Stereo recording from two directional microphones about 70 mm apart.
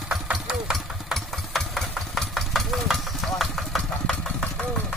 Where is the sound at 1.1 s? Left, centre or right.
Centre.